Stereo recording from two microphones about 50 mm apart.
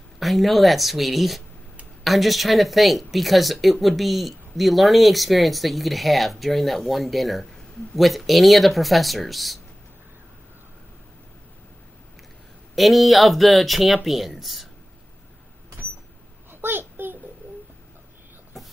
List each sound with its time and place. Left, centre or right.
0.2 s speech: centre
12.7 s speech: centre
16.6 s a sound: right